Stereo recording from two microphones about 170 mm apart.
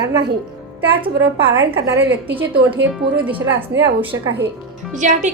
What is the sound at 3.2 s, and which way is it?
Speech, 10° right (ahead or behind).